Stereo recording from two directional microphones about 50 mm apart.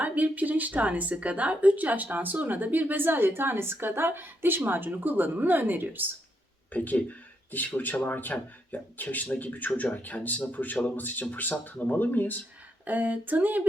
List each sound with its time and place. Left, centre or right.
0.0 s speech: right
6.7 s speech: left
12.8 s speech: right